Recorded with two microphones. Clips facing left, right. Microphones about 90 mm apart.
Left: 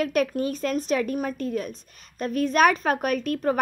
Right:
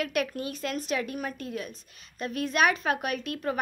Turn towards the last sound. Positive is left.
turn(degrees=45)  # may be behind; listen again after turning